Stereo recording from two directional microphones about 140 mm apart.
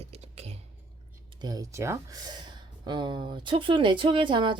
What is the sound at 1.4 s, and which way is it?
Speech, 30° right (ahead or behind).